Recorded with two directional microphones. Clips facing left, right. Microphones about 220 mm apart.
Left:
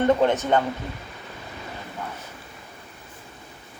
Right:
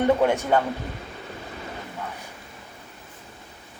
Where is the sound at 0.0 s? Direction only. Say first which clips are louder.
Left 1 dB; 10° right (ahead or behind).